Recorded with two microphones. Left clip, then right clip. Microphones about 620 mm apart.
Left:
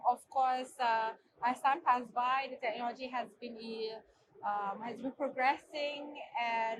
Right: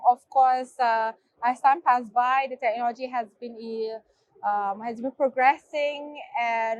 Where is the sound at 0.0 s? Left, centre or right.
Right.